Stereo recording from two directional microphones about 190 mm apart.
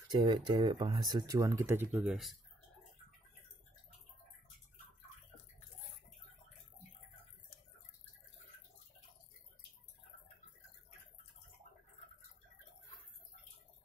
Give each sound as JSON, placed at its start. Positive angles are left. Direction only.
{"t": 0.1, "sound": "speech", "side_deg": -25}